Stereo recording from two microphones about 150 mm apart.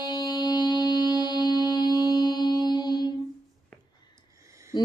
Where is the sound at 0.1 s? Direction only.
25° left (ahead or behind).